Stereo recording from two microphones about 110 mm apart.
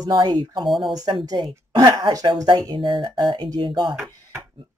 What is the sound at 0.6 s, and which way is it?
Speech, centre (ahead or behind).